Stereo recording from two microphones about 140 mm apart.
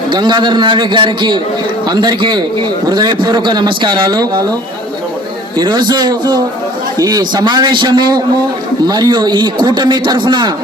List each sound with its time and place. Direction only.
0.1 s a man's voice: 30° right (ahead or behind)
5.5 s a man's voice: 30° right (ahead or behind)